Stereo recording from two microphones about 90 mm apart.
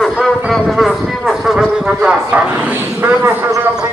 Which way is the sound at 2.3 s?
20° right (ahead or behind).